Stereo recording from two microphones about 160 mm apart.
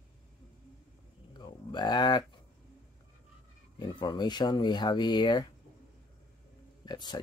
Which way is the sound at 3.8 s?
30° left (ahead or behind).